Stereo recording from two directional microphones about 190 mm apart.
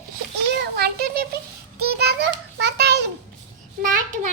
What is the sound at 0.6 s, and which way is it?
Child singing, 55° right (ahead or behind).